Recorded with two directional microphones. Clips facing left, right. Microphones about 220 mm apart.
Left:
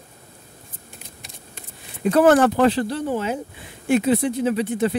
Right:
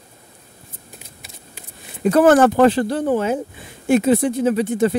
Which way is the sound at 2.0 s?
45° right (ahead or behind).